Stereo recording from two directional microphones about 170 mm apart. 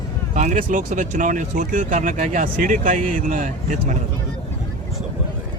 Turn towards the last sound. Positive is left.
turn(degrees=-50)  # may be behind; listen again after turning